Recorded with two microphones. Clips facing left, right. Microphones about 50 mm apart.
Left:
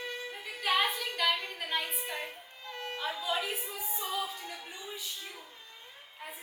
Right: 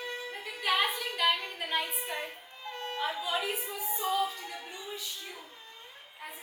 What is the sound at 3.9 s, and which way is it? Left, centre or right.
Music, centre.